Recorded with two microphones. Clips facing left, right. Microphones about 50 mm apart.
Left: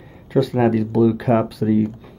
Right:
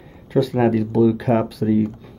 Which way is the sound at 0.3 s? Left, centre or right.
Centre.